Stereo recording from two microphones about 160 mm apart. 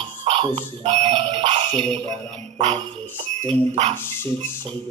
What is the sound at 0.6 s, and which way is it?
Speech, 45° right (ahead or behind).